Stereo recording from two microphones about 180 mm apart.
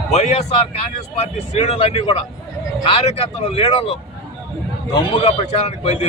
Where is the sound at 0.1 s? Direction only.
40° left (ahead or behind).